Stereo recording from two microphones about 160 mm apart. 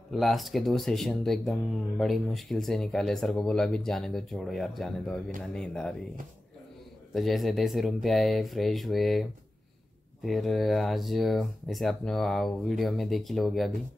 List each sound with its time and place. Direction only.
0.1 s speech: centre (ahead or behind)
7.2 s speech: centre (ahead or behind)